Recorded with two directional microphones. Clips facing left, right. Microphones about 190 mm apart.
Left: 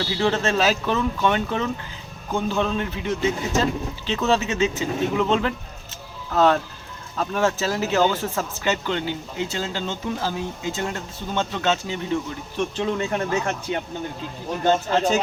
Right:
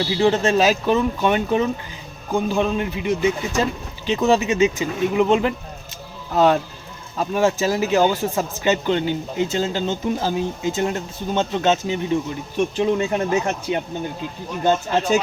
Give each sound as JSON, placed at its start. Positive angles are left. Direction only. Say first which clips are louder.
{"t": 0.0, "sound": "a man's voice", "louder": "right 4 dB", "side_deg": -15}